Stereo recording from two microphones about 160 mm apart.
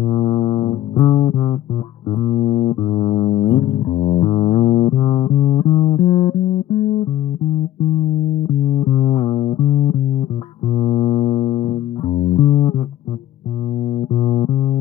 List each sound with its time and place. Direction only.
0.0 s music: 30° left (ahead or behind)
8.6 s music: 30° left (ahead or behind)
13.8 s music: 35° left (ahead or behind)